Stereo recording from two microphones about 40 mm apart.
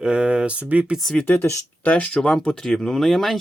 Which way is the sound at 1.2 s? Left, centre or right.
Left.